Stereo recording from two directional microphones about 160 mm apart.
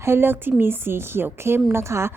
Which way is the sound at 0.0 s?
15° right (ahead or behind).